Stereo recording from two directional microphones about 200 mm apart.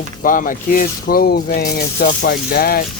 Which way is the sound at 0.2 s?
45° left (ahead or behind).